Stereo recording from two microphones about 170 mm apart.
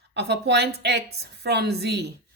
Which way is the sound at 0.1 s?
85° right.